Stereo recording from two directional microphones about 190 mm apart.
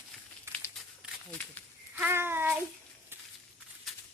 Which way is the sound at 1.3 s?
10° left (ahead or behind).